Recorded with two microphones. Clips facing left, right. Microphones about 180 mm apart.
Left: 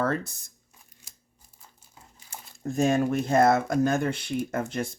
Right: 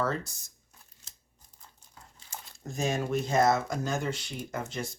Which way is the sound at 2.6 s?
55° left (ahead or behind).